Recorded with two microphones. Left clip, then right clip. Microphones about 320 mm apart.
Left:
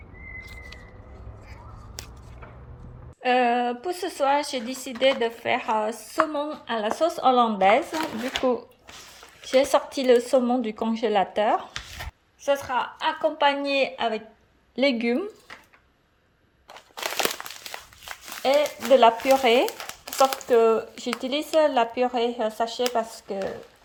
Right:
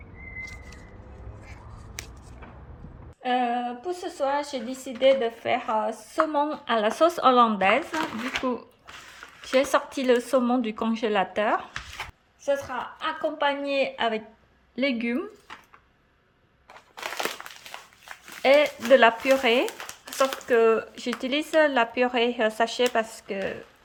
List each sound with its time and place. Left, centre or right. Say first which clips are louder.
3.2 s speech: left 4 dB; centre
16.7 s crumpling: left 4 dB; left
18.9 s speech: left 2 dB; centre